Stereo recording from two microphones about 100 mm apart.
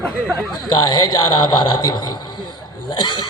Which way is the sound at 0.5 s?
45° left (ahead or behind).